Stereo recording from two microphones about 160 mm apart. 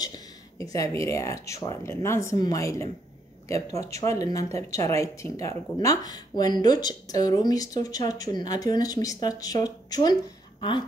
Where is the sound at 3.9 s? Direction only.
20° left (ahead or behind).